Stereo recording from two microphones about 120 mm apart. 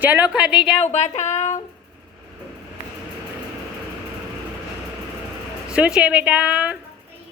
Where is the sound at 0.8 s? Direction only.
70° left (ahead or behind).